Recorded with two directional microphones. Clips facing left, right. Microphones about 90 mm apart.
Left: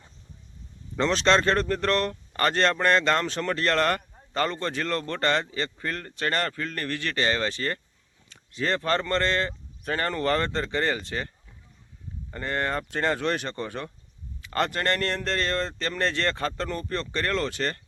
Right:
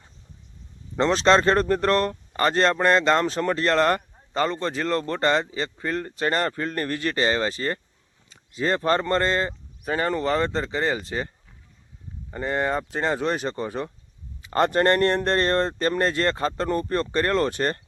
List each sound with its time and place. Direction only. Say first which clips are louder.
0.9 s speech: right 3 dB; 30° right (ahead or behind)
2.3 s speech: right 3 dB; 15° right (ahead or behind)
5.1 s speech: right 2 dB; 10° right (ahead or behind)
12.3 s speech: right 4 dB; 10° right (ahead or behind)
14.4 s speech: right 6 dB; 25° right (ahead or behind)
15.3 s speech: right 6 dB; 45° right (ahead or behind)
15.5 s speech: right 6 dB; 20° right (ahead or behind)
16.6 s speech: right 7 dB; 30° right (ahead or behind)